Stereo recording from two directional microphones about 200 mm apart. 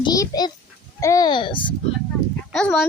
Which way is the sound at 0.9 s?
15° left (ahead or behind).